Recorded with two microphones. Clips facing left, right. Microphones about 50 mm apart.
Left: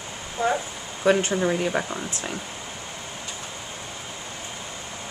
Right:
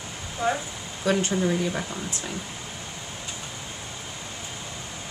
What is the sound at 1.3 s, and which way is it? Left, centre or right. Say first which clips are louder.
Speech: left 2 dB; centre.